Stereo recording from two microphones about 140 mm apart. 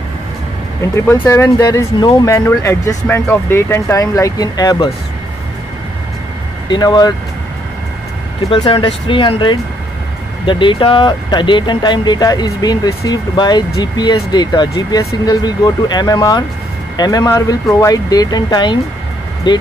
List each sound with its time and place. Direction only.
0.7 s speech: 20° left (ahead or behind)
2.3 s speech: 20° left (ahead or behind)
6.7 s speech: 30° left (ahead or behind)
8.5 s speech: 35° left (ahead or behind)